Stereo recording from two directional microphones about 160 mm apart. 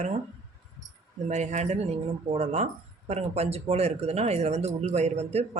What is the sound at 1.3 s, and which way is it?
Speech, 45° right (ahead or behind).